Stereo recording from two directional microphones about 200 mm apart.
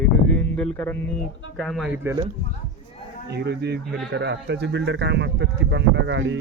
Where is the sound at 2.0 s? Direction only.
20° right (ahead or behind).